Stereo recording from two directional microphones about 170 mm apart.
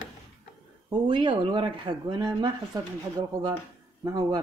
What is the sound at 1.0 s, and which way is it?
Speech, 30° right (ahead or behind).